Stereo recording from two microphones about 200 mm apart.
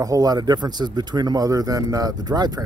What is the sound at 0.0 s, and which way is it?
Speech, 20° right (ahead or behind).